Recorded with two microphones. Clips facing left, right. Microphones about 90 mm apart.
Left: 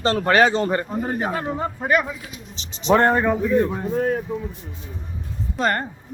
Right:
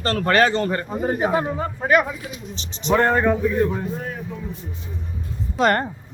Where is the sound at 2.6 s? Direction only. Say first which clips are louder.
Right 3 dB; 40° right (ahead or behind).